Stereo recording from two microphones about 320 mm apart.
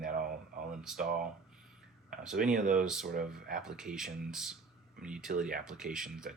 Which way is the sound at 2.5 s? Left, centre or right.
Right.